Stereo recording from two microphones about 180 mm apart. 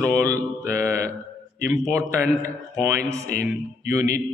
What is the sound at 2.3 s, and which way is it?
Speech, 20° right (ahead or behind).